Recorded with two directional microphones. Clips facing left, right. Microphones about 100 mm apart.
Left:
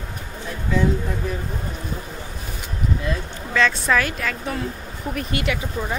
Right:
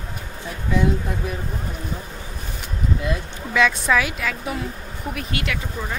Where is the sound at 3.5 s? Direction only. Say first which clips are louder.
Right 1 dB; 10° right (ahead or behind).